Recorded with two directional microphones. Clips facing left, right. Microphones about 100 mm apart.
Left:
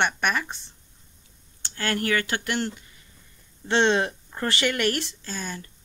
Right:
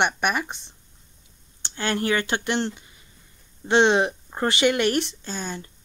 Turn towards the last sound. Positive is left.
turn(degrees=-25)  # may be behind; listen again after turning